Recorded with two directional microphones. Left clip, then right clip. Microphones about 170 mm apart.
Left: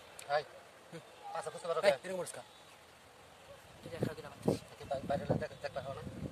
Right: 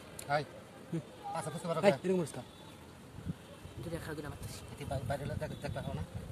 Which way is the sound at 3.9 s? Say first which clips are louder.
Left 2 dB; 25° right (ahead or behind).